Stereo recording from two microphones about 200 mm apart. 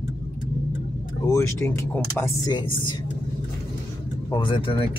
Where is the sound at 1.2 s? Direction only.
15° left (ahead or behind).